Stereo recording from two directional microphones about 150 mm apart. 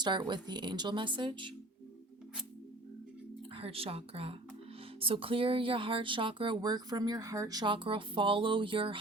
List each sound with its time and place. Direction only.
0.0 s speech: 30° right (ahead or behind)
3.5 s speech: 40° right (ahead or behind)